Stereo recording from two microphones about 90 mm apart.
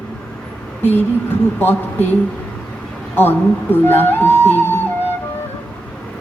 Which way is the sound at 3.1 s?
25° left (ahead or behind).